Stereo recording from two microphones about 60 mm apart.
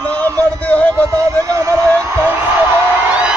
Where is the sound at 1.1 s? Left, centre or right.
Right.